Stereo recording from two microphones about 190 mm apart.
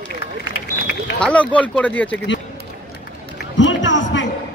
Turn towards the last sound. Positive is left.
turn(degrees=75)  # may be behind; listen again after turning